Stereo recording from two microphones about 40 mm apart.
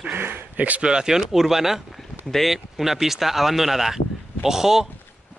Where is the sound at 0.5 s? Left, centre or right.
Right.